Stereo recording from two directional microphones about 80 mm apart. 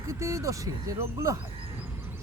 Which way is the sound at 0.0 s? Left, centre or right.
Right.